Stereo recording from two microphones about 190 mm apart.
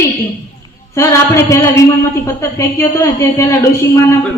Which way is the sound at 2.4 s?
15° left (ahead or behind).